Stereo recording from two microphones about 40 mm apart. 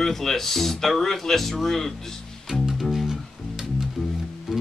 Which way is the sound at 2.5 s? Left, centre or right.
Centre.